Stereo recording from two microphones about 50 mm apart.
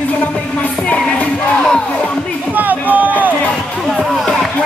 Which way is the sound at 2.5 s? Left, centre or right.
Right.